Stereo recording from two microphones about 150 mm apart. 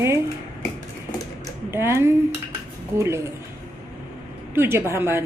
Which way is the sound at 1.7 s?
15° right (ahead or behind).